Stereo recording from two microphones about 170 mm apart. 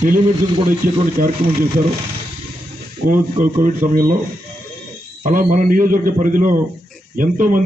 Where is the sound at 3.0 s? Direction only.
50° right (ahead or behind).